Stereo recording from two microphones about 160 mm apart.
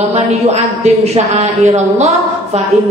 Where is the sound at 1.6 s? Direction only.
45° right (ahead or behind).